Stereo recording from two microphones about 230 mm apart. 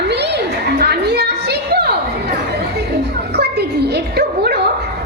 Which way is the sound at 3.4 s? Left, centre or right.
Right.